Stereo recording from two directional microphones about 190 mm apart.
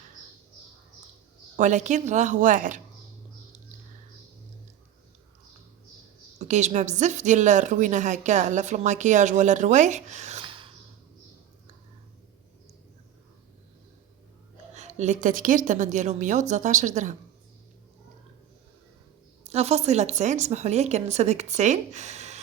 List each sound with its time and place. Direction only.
1.5 s a woman's voice: 40° right (ahead or behind)
6.4 s a woman's voice: 40° right (ahead or behind)
14.8 s a woman's voice: 35° right (ahead or behind)
19.5 s a woman's voice: 35° right (ahead or behind)